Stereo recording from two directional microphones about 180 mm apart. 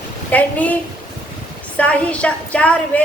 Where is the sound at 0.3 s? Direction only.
10° left (ahead or behind).